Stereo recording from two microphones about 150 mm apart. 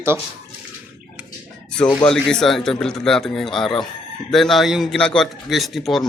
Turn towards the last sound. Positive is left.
turn(degrees=0)  # may be behind; listen again after turning